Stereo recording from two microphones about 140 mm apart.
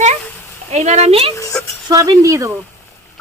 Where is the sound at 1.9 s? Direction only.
25° right (ahead or behind).